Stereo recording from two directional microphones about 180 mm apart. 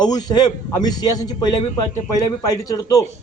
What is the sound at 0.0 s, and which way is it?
A man's voice, 20° left (ahead or behind).